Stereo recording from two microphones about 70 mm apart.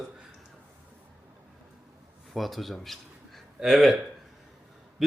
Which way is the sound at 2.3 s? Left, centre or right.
Centre.